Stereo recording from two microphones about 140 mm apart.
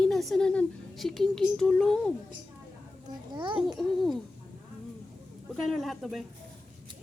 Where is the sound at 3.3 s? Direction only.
35° right (ahead or behind).